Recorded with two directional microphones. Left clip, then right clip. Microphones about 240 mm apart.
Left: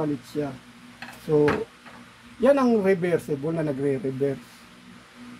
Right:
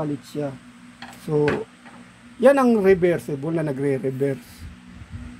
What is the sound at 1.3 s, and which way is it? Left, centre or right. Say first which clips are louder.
Speech: even; right.